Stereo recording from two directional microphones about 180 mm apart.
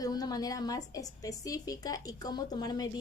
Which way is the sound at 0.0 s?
20° left (ahead or behind).